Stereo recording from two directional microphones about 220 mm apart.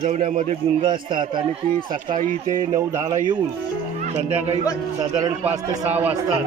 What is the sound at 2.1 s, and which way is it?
Speech, 35° right (ahead or behind).